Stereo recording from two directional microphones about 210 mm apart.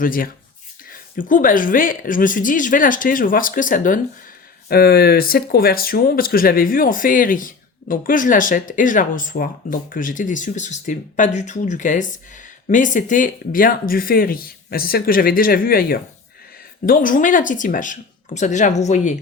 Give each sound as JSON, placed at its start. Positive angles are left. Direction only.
{"t": 0.0, "sound": "speech", "side_deg": 40}